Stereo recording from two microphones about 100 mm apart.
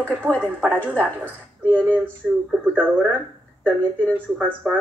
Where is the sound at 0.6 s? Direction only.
10° left (ahead or behind).